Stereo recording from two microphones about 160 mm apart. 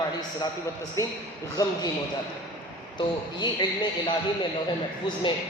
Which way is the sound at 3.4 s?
30° left (ahead or behind).